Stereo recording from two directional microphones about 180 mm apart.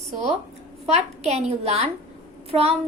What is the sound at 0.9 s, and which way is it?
A woman's voice, 35° right (ahead or behind).